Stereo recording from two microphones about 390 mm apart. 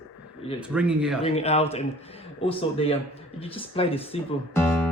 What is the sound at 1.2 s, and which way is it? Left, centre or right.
A man's voice, centre.